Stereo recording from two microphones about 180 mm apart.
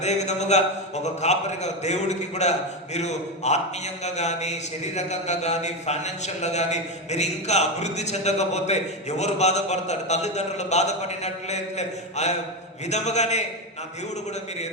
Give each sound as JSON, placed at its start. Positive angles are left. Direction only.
{"t": 0.0, "sound": "a man's voice", "side_deg": 40}